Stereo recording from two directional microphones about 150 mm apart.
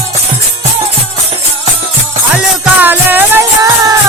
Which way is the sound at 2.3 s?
10° right (ahead or behind).